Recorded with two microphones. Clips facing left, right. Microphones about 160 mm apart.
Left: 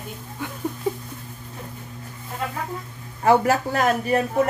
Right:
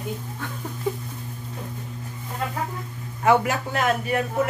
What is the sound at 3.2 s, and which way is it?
Speech, 35° left (ahead or behind).